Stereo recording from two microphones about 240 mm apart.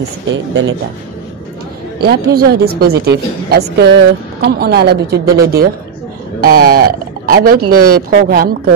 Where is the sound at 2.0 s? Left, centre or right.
Right.